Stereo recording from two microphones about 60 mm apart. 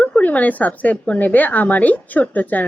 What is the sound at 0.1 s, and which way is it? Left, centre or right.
A woman's voice, left.